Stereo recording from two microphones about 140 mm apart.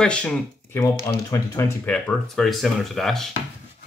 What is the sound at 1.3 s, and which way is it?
Speech, 20° left (ahead or behind).